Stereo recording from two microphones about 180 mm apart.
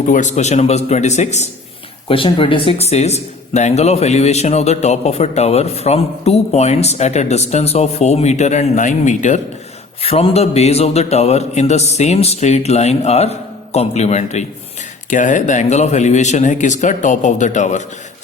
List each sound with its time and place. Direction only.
0.1 s a man's voice: 40° left (ahead or behind)